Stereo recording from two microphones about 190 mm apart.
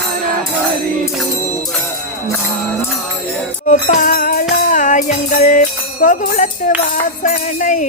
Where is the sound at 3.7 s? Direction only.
45° left (ahead or behind).